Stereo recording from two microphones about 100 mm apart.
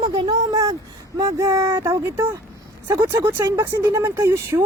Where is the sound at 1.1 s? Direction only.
35° right (ahead or behind).